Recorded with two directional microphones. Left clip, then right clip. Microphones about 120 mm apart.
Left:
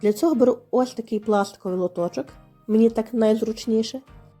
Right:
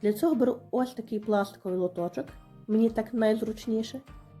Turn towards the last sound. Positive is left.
turn(degrees=45)  # may be behind; listen again after turning